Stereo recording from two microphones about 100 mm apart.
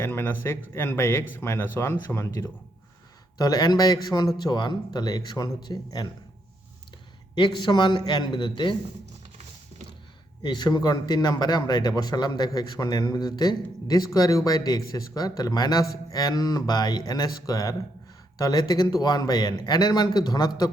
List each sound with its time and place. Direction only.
0.0 s speech: 20° left (ahead or behind)
3.3 s speech: 40° left (ahead or behind)
7.3 s a man's voice: 50° left (ahead or behind)
10.4 s speech: 45° left (ahead or behind)